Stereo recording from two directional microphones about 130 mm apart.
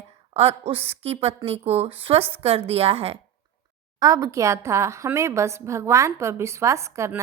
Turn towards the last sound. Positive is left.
turn(degrees=-20)  # may be behind; listen again after turning